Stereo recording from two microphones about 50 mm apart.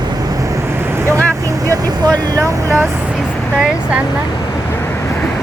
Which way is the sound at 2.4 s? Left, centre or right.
Right.